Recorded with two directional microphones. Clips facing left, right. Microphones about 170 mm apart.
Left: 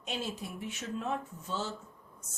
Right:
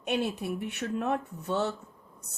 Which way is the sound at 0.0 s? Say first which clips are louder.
Right 8 dB; 60° right (ahead or behind).